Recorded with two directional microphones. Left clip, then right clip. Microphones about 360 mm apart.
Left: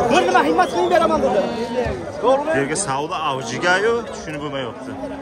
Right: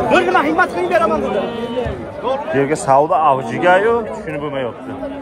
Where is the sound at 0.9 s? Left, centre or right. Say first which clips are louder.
Right 3 dB; centre.